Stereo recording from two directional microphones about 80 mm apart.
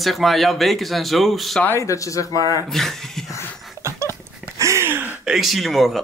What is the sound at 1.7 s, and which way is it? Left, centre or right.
Speech, left.